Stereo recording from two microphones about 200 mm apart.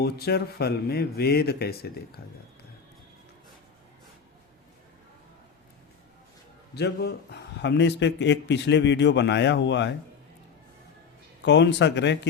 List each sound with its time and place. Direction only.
0.0 s speech: 55° left (ahead or behind)
6.7 s a man's voice: 55° left (ahead or behind)
11.4 s a man's voice: 60° left (ahead or behind)